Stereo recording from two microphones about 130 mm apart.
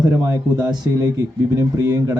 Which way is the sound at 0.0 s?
30° right (ahead or behind).